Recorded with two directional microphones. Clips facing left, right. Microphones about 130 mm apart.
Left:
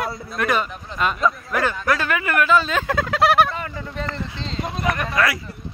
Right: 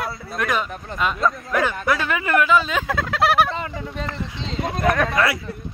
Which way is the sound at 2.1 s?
25° right (ahead or behind).